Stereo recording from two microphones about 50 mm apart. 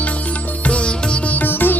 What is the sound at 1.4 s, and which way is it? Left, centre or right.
Music, left.